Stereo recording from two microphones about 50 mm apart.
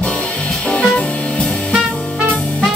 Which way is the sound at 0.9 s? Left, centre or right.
Left.